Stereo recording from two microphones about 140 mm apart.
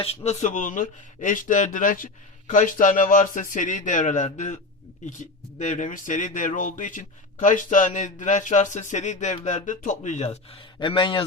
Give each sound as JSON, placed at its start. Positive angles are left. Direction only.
{"t": 0.0, "sound": "speech", "side_deg": 45}
{"t": 5.5, "sound": "speech", "side_deg": 60}
{"t": 10.8, "sound": "a man's voice", "side_deg": 35}